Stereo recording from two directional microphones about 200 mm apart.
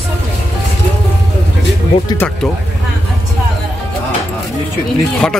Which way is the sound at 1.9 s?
25° left (ahead or behind).